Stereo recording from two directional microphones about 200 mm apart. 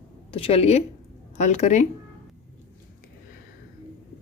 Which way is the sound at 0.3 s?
25° left (ahead or behind).